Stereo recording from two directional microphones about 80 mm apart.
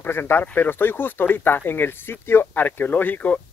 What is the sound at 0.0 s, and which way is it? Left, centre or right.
Speech, left.